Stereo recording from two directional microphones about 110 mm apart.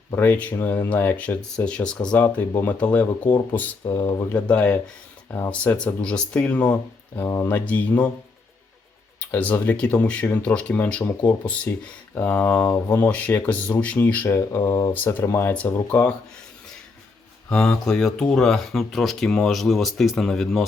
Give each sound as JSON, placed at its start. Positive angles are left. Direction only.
{"t": 0.1, "sound": "speech", "side_deg": 15}
{"t": 3.8, "sound": "speech", "side_deg": 30}
{"t": 4.3, "sound": "speech", "side_deg": 10}
{"t": 9.3, "sound": "speech", "side_deg": 15}
{"t": 15.9, "sound": "speech", "side_deg": 10}
{"t": 17.5, "sound": "speech", "side_deg": 5}